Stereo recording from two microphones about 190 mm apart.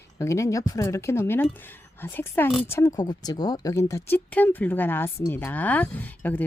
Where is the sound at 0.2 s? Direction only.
15° left (ahead or behind).